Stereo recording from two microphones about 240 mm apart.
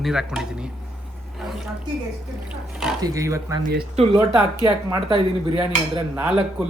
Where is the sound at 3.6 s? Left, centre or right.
Right.